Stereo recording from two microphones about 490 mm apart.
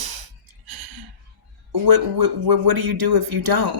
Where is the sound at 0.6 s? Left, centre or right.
Right.